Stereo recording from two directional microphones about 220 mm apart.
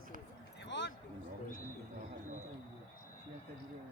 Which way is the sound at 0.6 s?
55° left (ahead or behind).